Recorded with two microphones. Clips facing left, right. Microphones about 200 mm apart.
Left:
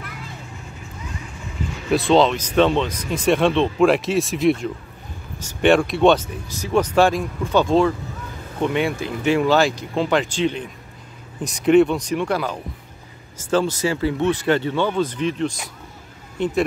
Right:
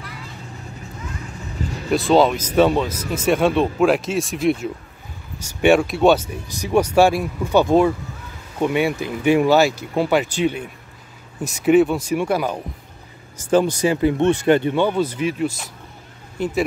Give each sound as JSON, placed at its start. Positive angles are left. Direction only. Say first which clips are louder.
{"t": 1.9, "sound": "speech", "louder": "even", "side_deg": 0}